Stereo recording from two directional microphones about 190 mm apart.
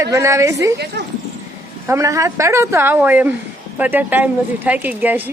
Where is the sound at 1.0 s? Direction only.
65° right (ahead or behind).